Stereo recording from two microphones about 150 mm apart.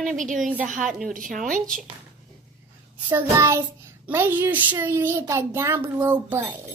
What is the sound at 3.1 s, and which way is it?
Child singing, 20° right (ahead or behind).